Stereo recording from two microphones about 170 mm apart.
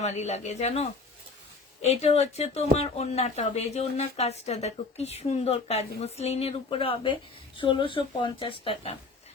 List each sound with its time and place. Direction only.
0.0 s speech: 40° left (ahead or behind)